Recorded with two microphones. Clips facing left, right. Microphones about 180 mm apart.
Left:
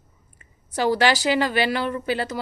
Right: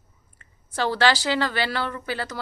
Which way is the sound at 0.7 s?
15° left (ahead or behind).